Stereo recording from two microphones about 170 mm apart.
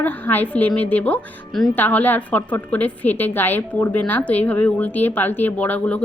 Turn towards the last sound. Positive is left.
turn(degrees=10)  # may be behind; listen again after turning